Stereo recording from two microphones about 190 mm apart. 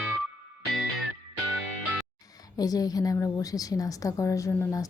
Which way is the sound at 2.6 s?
20° left (ahead or behind).